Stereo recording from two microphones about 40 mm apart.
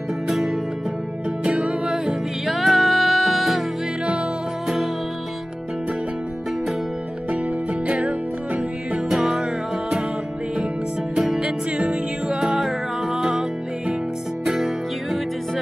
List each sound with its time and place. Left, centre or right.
0.3 s music: centre
1.4 s music: right
2.4 s music: centre
4.0 s music: right
7.2 s music: right
9.1 s music: centre
11.1 s music: centre